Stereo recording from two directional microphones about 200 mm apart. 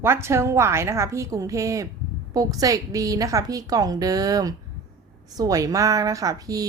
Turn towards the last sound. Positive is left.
turn(degrees=-15)  # may be behind; listen again after turning